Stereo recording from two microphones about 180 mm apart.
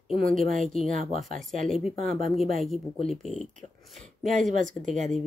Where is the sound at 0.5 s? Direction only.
Centre (ahead or behind).